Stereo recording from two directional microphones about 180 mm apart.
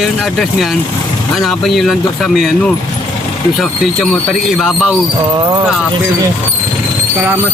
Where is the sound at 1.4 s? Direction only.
Centre (ahead or behind).